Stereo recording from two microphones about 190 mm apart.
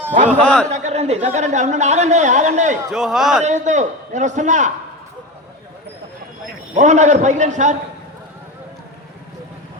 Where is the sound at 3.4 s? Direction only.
40° right (ahead or behind).